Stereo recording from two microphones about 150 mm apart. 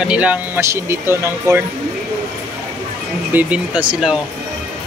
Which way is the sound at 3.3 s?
10° right (ahead or behind).